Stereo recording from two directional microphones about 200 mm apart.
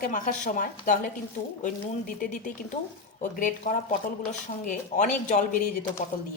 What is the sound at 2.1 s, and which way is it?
Speech, 40° left (ahead or behind).